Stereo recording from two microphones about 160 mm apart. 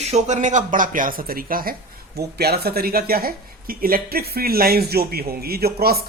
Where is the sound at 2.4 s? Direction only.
80° right.